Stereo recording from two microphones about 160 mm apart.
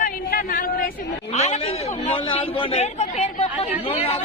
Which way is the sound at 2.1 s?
35° left (ahead or behind).